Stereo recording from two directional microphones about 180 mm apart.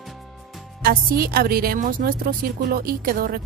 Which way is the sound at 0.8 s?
55° right (ahead or behind).